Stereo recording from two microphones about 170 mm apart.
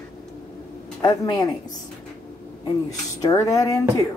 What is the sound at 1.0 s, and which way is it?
Speech, 20° left (ahead or behind).